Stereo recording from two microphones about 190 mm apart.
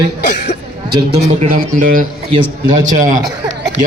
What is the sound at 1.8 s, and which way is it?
A man's voice, 45° right (ahead or behind).